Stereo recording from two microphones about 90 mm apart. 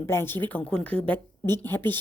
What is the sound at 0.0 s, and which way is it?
A woman's voice, 25° left (ahead or behind).